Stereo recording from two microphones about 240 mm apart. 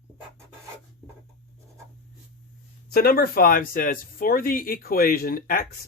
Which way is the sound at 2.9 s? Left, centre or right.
Left.